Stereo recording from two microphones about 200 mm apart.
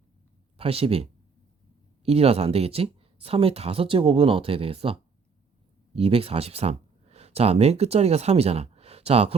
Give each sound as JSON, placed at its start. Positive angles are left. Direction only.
{"t": 0.5, "sound": "speech", "side_deg": -30}
{"t": 2.0, "sound": "speech", "side_deg": -30}